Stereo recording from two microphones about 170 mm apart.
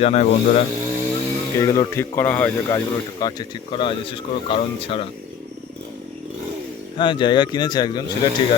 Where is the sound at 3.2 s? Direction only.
25° left (ahead or behind).